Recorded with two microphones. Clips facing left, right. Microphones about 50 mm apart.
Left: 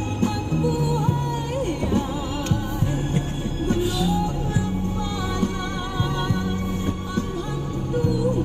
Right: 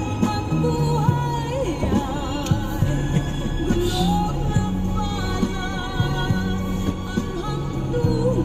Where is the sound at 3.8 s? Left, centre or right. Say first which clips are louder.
Right 2 dB; left.